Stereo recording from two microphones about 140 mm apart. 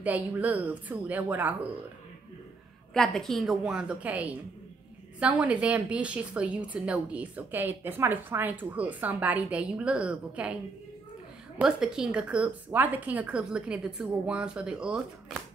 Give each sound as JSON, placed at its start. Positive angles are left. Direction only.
{"t": 0.0, "sound": "a woman's voice", "side_deg": -10}
{"t": 2.9, "sound": "a woman's voice", "side_deg": 5}